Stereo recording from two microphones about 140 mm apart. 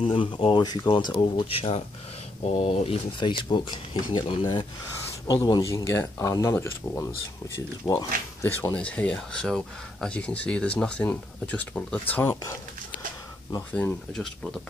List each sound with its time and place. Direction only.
0.0 s speech: 40° left (ahead or behind)
8.7 s speech: 10° left (ahead or behind)